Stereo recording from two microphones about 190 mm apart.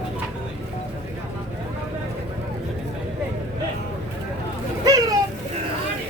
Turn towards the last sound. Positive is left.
turn(degrees=-20)  # may be behind; listen again after turning